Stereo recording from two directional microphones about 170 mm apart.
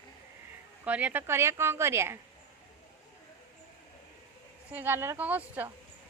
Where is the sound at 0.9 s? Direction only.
10° right (ahead or behind).